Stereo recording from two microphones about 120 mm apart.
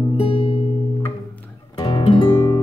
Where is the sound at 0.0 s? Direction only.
45° left (ahead or behind).